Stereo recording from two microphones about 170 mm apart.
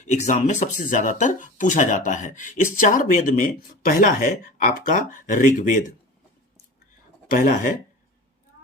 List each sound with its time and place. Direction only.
0.1 s speech: 45° left (ahead or behind)
7.3 s speech: 50° left (ahead or behind)